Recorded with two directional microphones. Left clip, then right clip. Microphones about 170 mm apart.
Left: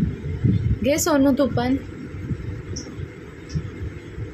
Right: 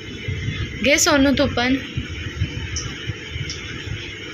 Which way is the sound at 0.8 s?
20° left (ahead or behind).